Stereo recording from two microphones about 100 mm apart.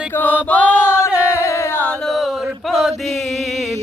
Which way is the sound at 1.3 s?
30° left (ahead or behind).